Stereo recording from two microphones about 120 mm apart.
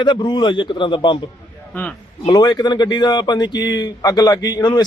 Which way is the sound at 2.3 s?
35° left (ahead or behind).